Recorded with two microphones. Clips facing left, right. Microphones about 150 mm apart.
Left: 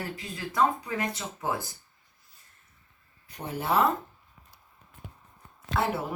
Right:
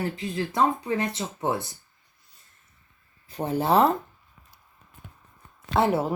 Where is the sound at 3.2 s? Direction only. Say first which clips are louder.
Right 6 dB; 30° right (ahead or behind).